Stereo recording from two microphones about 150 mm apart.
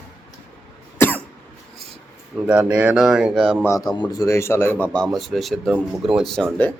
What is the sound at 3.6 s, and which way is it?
A man's voice, 20° left (ahead or behind).